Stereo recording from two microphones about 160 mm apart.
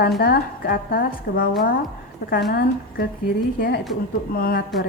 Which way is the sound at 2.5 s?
65° left (ahead or behind).